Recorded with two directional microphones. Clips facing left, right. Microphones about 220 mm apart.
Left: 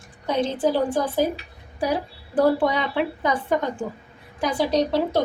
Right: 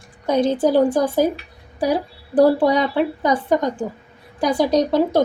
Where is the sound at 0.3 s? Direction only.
45° right (ahead or behind).